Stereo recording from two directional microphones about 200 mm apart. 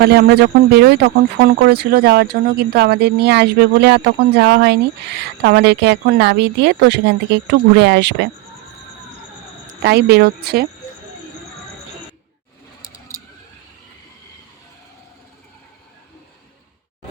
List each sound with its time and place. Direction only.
0.0 s speech: 55° right (ahead or behind)
9.6 s a woman's voice: 55° right (ahead or behind)